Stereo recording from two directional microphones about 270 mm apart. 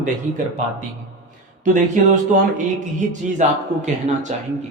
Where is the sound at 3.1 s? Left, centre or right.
Right.